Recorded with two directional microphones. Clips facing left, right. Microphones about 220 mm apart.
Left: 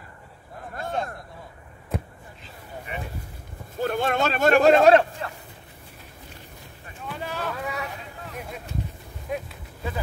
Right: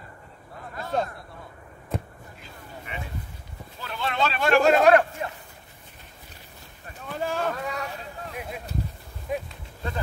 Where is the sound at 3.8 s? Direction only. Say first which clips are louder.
Left 5 dB; 50° left (ahead or behind).